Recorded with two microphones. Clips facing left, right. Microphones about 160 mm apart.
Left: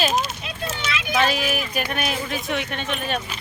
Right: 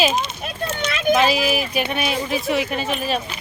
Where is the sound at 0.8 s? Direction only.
50° right (ahead or behind).